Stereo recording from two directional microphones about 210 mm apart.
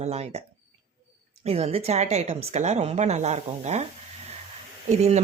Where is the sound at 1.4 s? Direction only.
30° right (ahead or behind).